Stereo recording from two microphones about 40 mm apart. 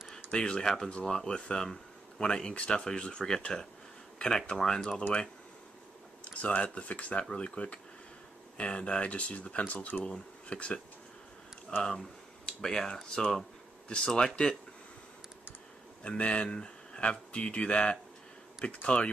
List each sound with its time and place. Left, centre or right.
0.3 s speech: left
6.2 s speech: left
11.8 s speech: centre
16.0 s speech: left